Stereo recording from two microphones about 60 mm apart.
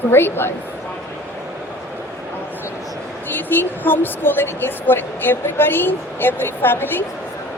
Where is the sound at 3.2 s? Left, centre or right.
Left.